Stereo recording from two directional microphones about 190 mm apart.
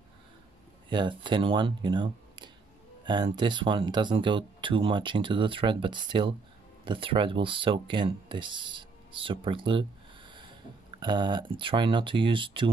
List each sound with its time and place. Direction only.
0.8 s speech: 25° right (ahead or behind)